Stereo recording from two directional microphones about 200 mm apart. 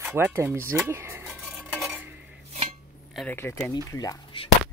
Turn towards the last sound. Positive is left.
turn(degrees=20)  # may be behind; listen again after turning